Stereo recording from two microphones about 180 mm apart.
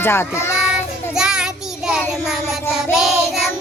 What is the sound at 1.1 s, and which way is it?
Child singing, 5° right (ahead or behind).